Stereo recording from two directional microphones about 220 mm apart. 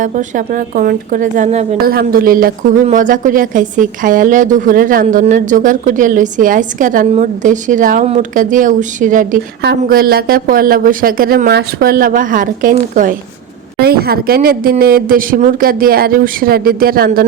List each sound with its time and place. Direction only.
0.0 s a woman's voice: 35° right (ahead or behind)